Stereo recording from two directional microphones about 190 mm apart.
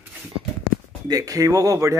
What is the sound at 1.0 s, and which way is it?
Speech, 20° right (ahead or behind).